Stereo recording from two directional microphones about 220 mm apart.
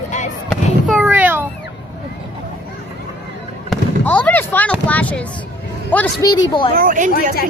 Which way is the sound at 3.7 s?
5° left (ahead or behind).